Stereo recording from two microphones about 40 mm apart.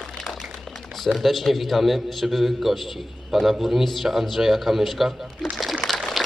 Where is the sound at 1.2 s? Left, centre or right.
Centre.